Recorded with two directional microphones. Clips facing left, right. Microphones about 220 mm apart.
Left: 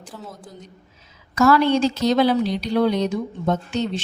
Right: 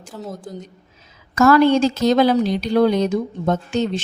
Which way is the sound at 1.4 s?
45° right (ahead or behind).